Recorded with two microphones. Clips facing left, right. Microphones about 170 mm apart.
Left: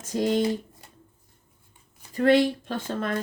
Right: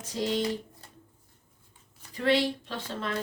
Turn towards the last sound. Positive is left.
turn(degrees=50)  # may be behind; listen again after turning